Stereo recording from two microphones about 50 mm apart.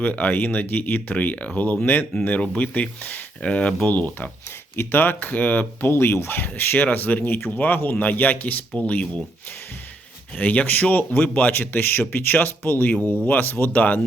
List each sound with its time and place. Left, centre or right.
0.0 s speech: left
4.8 s speech: left
5.9 s speech: left
10.3 s speech: left
11.5 s speech: left